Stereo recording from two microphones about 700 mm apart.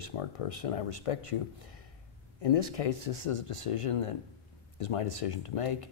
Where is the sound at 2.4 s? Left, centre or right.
Left.